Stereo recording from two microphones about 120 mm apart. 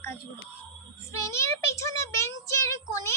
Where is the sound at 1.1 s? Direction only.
25° left (ahead or behind).